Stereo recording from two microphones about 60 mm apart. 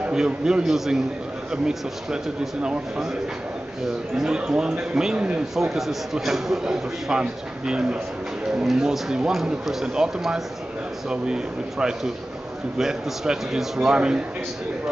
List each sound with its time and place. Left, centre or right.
0.0 s a man's voice: centre
4.2 s a man's voice: centre
5.6 s a man's voice: centre